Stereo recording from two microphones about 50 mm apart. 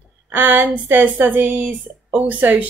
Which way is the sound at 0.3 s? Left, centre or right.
Right.